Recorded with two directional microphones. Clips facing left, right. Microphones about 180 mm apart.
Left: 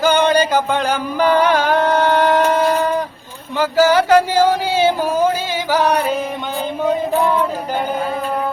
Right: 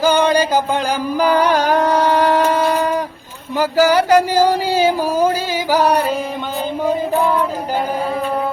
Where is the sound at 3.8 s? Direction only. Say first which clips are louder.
Left 1 dB; 10° right (ahead or behind).